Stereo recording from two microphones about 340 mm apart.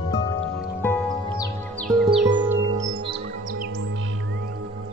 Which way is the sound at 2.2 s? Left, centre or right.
Centre.